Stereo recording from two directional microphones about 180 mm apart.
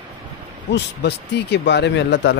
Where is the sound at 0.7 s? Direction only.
70° left (ahead or behind).